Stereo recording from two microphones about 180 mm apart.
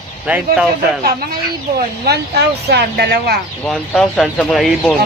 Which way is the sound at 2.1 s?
65° right (ahead or behind).